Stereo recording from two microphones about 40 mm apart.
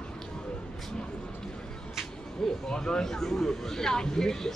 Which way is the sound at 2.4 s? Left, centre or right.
Centre.